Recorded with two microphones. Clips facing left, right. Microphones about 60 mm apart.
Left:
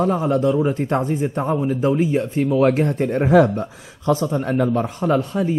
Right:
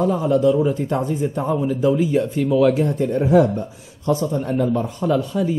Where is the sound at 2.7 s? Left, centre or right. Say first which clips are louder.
Even; left.